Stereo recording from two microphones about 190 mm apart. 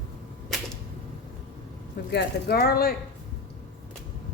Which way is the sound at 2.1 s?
60° left (ahead or behind).